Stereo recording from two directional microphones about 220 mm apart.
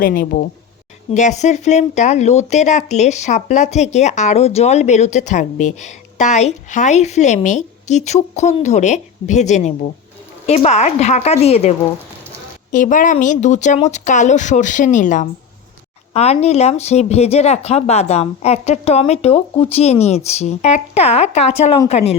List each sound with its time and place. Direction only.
0.0 s speech: 40° left (ahead or behind)
12.7 s speech: 35° left (ahead or behind)